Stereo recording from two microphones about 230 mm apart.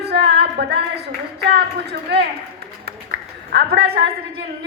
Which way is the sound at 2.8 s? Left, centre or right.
Right.